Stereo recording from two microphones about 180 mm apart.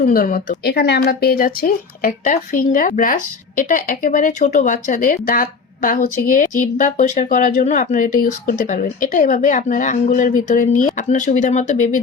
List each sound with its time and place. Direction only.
0.0 s speech: 50° left (ahead or behind)